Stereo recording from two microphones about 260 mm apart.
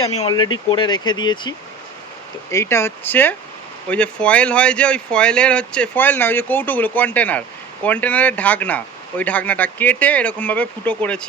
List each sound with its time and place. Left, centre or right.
0.2 s speech: centre